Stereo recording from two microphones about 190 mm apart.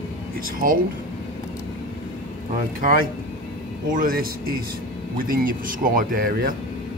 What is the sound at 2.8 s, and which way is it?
Speech, 50° right (ahead or behind).